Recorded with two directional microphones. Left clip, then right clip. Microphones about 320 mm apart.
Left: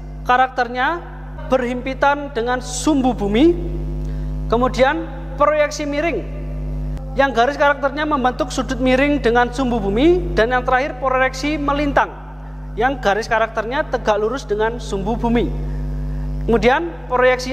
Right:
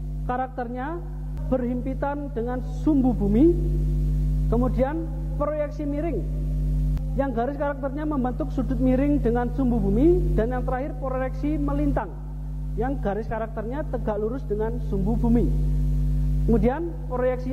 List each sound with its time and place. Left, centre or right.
0.3 s a man's voice: centre
4.5 s speech: centre
4.7 s a man's voice: centre
7.2 s a man's voice: centre
14.9 s speech: left
16.4 s a man's voice: centre